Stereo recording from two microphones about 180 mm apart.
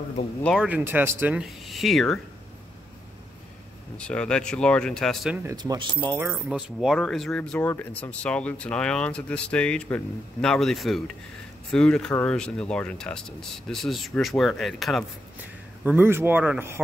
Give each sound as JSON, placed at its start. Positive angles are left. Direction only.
{"t": 0.4, "sound": "speech", "side_deg": 5}
{"t": 0.7, "sound": "speech", "side_deg": -10}
{"t": 4.0, "sound": "speech", "side_deg": 5}
{"t": 5.3, "sound": "speech", "side_deg": -10}
{"t": 5.6, "sound": "speech", "side_deg": -25}
{"t": 6.5, "sound": "speech", "side_deg": 0}
{"t": 15.8, "sound": "speech", "side_deg": -10}